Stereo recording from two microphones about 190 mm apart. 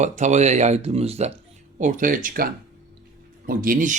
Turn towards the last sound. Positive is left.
turn(degrees=-45)  # may be behind; listen again after turning